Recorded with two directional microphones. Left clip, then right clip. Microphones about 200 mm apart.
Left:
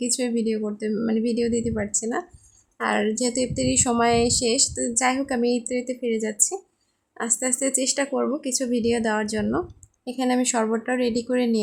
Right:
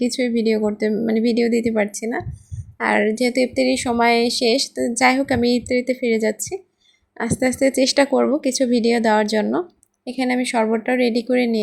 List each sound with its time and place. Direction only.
0.0 s speech: 10° right (ahead or behind)